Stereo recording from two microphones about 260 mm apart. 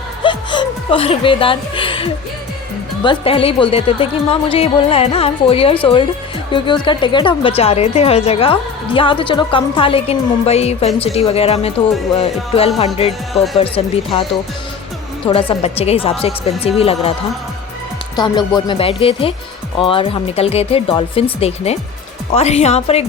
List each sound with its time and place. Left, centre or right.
0.2 s chuckle: centre
3.0 s a woman's voice: centre
15.3 s a woman's voice: left
18.2 s a woman's voice: centre